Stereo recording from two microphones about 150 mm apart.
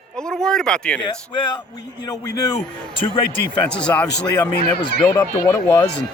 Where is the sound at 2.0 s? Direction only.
25° left (ahead or behind).